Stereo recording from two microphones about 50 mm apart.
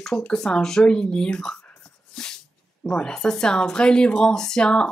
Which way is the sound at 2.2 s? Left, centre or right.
Centre.